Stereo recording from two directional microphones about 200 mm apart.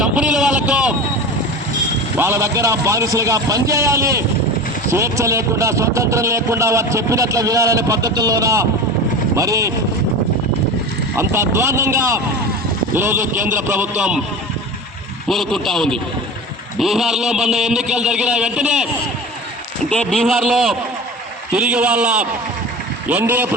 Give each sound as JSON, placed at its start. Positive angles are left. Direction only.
{"t": 0.0, "sound": "vehicle", "side_deg": -5}
{"t": 2.1, "sound": "a man's voice", "side_deg": -15}
{"t": 11.2, "sound": "a man's voice", "side_deg": -10}
{"t": 15.3, "sound": "a man's voice", "side_deg": 0}
{"t": 19.9, "sound": "a man's voice", "side_deg": 5}